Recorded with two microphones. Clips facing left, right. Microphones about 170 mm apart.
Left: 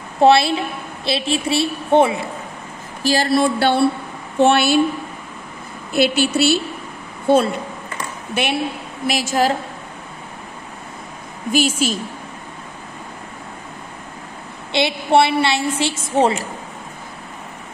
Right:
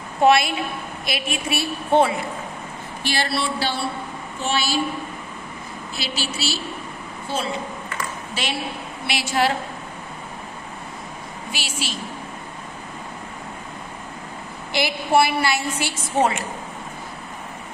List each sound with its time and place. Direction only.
0.2 s a woman's voice: 30° left (ahead or behind)
3.0 s a woman's voice: 40° left (ahead or behind); by 4.7 s 60° left (ahead or behind)
5.9 s a woman's voice: 55° left (ahead or behind)
9.0 s speech: 45° left (ahead or behind)
11.5 s speech: 45° left (ahead or behind)
14.7 s a woman's voice: 25° left (ahead or behind)